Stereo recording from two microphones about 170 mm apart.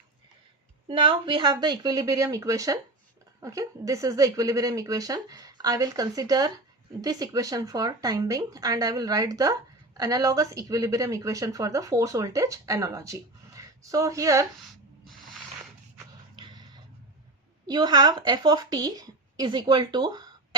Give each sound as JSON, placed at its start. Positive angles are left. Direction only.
{"t": 0.9, "sound": "speech", "side_deg": -30}
{"t": 16.3, "sound": "dog", "side_deg": -25}
{"t": 17.7, "sound": "speech", "side_deg": -25}